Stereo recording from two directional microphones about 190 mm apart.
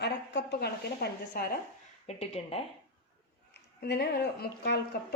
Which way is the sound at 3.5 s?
60° left (ahead or behind).